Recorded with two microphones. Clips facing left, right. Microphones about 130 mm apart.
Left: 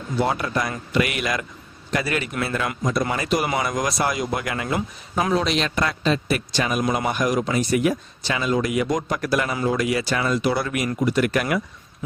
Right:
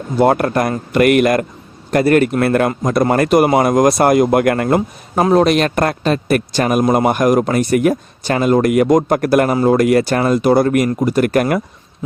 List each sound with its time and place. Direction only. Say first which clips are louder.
0.2 s speech: right 10 dB; 55° right (ahead or behind)